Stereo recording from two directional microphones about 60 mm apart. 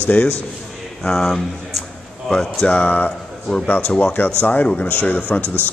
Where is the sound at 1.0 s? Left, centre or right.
Centre.